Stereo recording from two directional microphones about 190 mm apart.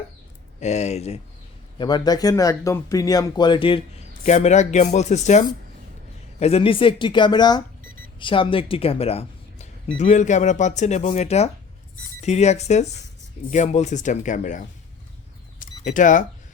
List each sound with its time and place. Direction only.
0.6 s speech: 35° left (ahead or behind)
1.8 s speech: 20° left (ahead or behind)
4.2 s speech: 40° left (ahead or behind)
15.5 s a sound: 45° left (ahead or behind)